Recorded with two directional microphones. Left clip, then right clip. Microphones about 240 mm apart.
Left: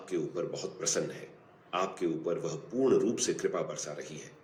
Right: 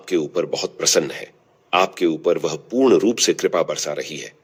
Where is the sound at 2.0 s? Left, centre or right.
Right.